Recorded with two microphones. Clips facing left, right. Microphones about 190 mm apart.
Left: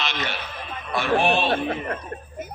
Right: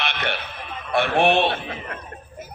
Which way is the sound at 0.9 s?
60° right (ahead or behind).